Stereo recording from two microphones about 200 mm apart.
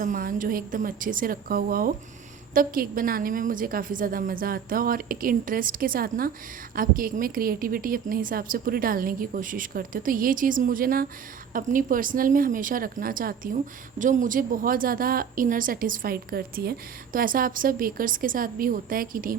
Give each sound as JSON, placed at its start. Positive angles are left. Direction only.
{"t": 0.0, "sound": "speech", "side_deg": -45}